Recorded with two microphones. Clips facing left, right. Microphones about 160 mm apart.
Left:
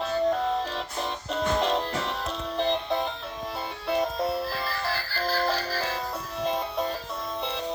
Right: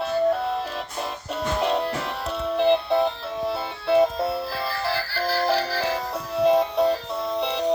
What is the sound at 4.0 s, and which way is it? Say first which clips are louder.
Music: right 5 dB; 10° right (ahead or behind).